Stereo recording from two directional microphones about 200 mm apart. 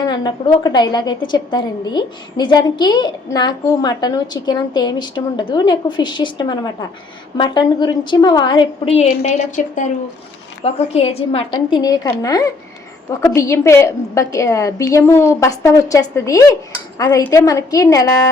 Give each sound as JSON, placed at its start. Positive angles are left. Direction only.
{"t": 0.0, "sound": "a woman's voice", "side_deg": 20}